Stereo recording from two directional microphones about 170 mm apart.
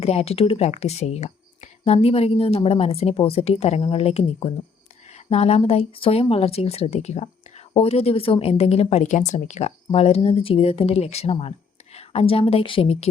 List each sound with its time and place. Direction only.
0.0 s speech: 35° left (ahead or behind)